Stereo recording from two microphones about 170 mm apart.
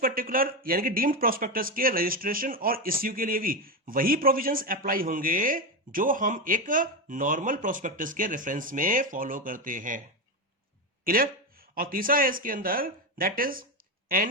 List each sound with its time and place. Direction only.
0.0 s speech: 55° right (ahead or behind)
11.0 s speech: 60° right (ahead or behind)